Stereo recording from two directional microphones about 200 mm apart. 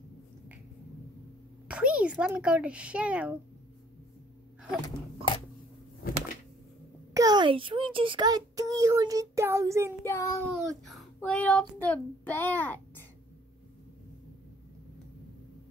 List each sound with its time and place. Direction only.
1.7 s speech: 5° right (ahead or behind)
4.8 s a sound: 25° left (ahead or behind)
7.2 s a child's voice: 20° right (ahead or behind)
10.0 s child singing: 15° left (ahead or behind)
10.9 s child singing: 5° left (ahead or behind)